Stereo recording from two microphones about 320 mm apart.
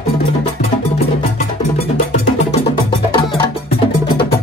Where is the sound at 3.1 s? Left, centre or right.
Centre.